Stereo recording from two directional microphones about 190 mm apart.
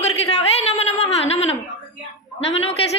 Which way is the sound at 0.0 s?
35° left (ahead or behind).